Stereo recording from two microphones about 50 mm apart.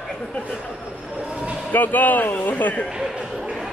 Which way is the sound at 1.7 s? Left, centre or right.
Left.